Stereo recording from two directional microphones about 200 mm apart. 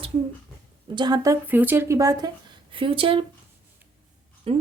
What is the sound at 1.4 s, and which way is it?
A woman's voice, 10° right (ahead or behind).